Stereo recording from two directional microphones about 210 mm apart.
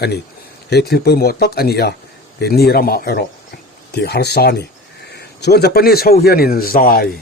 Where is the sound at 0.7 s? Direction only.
50° left (ahead or behind).